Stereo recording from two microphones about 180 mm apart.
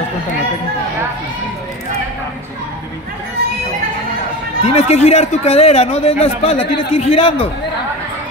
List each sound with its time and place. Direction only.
4.6 s a man's voice: 35° left (ahead or behind)